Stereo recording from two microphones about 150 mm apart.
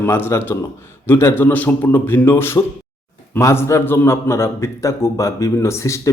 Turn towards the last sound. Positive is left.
turn(degrees=20)  # may be behind; listen again after turning